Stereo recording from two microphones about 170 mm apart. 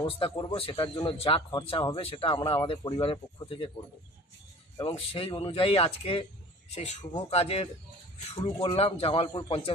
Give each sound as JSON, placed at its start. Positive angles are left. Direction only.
{"t": 0.0, "sound": "speech", "side_deg": 30}
{"t": 4.7, "sound": "speech", "side_deg": 35}